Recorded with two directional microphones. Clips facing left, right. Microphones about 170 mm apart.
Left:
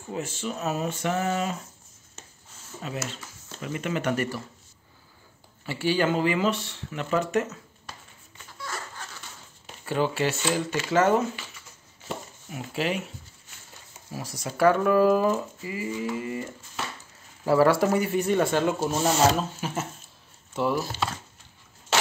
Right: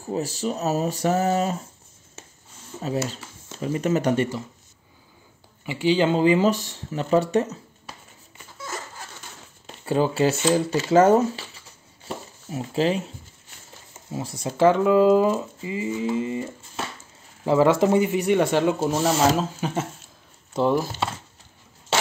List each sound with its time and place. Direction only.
0.0 s speech: 35° right (ahead or behind)
2.8 s speech: 35° right (ahead or behind)
5.7 s speech: 20° right (ahead or behind); by 7.4 s 35° right (ahead or behind)
8.5 s a sound: 20° right (ahead or behind)
9.8 s speech: 30° right (ahead or behind)
14.1 s speech: 25° right (ahead or behind)